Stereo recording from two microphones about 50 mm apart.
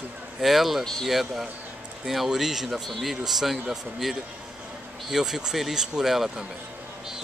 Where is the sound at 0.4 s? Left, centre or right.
Centre.